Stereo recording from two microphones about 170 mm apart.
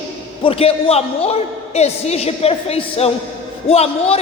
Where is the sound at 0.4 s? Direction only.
35° left (ahead or behind).